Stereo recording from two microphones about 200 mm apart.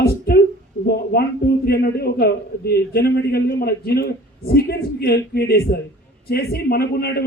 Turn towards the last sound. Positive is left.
turn(degrees=50)  # may be behind; listen again after turning